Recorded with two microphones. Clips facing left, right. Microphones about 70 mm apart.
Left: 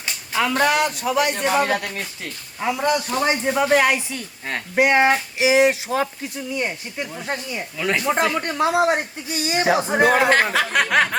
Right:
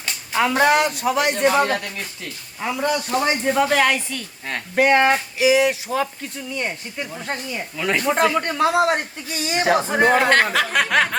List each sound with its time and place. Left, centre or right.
0.5 s speech: right
2.6 s speech: centre
5.4 s a sound: left
6.3 s speech: centre